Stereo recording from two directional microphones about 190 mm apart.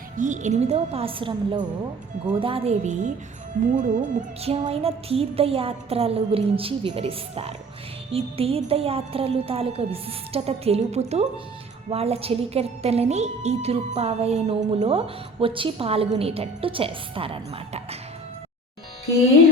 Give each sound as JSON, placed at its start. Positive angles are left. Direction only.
{"t": 0.2, "sound": "a woman's voice", "side_deg": -40}